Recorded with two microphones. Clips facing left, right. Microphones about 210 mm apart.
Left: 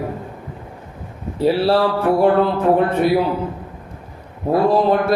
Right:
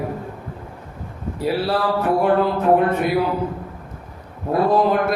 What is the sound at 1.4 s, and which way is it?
Speech, 30° left (ahead or behind).